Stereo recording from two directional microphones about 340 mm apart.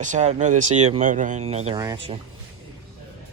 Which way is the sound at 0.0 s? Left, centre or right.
Right.